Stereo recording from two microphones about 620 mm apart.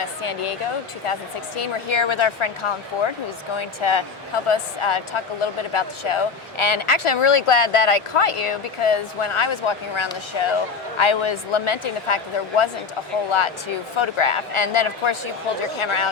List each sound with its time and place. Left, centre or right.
0.0 s speech: left
1.5 s speech: left
13.9 s speech: left